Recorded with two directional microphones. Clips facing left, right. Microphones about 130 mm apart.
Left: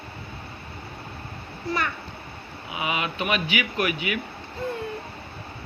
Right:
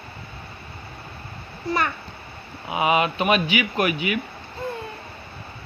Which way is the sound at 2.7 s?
40° right (ahead or behind).